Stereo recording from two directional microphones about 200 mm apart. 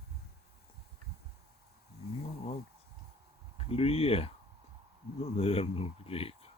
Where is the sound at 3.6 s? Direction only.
30° left (ahead or behind).